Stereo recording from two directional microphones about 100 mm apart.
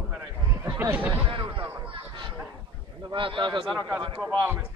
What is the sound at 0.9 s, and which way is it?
Speech, 15° right (ahead or behind).